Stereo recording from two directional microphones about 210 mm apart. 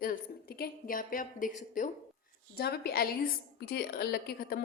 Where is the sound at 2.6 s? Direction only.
50° left (ahead or behind).